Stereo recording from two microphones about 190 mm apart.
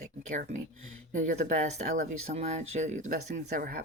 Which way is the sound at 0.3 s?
40° right (ahead or behind).